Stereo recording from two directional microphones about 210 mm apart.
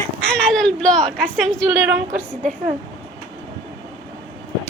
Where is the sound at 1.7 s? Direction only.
15° right (ahead or behind).